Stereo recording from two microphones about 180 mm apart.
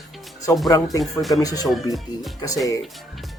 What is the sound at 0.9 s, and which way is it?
Speech, centre (ahead or behind).